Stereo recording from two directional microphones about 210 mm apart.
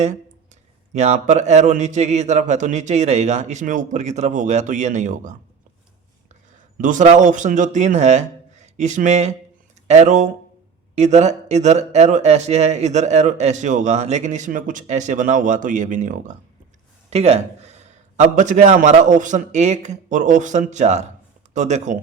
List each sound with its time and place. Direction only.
0.9 s speech: 30° right (ahead or behind)
6.8 s speech: 35° right (ahead or behind)